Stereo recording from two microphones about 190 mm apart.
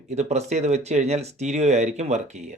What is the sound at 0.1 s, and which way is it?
Speech, 35° right (ahead or behind).